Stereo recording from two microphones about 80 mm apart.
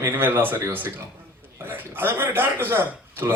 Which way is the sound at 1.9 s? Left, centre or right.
Right.